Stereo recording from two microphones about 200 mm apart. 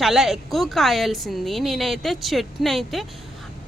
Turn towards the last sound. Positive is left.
turn(degrees=0)  # may be behind; listen again after turning